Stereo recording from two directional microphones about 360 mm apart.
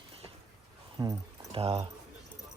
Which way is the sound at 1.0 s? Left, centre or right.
Centre.